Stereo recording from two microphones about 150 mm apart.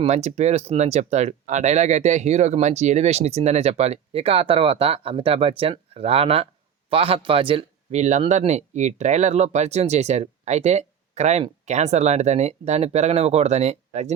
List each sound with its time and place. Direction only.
0.0 s speech: 50° right (ahead or behind)